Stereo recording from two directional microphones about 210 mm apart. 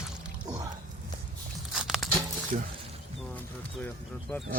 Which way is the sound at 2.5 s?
35° right (ahead or behind).